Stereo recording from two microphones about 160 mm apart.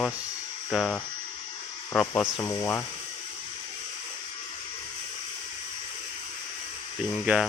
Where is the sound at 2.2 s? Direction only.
20° left (ahead or behind).